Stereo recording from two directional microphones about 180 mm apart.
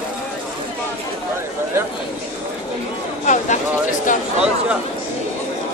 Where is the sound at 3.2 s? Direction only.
45° left (ahead or behind).